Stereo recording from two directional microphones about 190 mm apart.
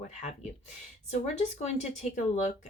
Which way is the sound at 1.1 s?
35° left (ahead or behind).